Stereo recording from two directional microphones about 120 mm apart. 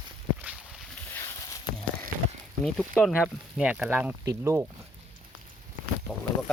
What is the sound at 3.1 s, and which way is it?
Speech, 10° right (ahead or behind).